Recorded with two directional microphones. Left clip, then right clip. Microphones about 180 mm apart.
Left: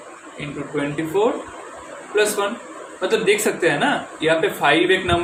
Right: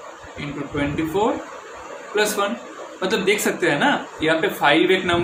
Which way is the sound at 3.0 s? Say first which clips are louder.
Left 2 dB; 20° right (ahead or behind).